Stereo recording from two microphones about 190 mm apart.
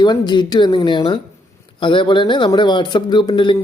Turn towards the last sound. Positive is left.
turn(degrees=25)  # may be behind; listen again after turning